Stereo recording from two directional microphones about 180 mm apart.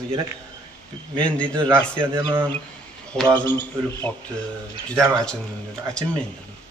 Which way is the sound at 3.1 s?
5° left (ahead or behind).